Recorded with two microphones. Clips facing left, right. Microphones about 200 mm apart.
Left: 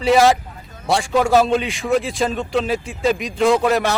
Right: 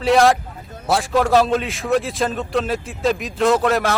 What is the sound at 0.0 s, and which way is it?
A man's voice, centre (ahead or behind).